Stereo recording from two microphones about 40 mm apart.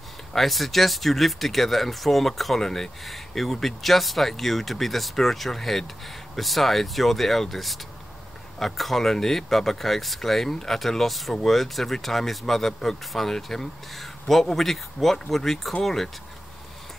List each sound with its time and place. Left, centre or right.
0.3 s speech: centre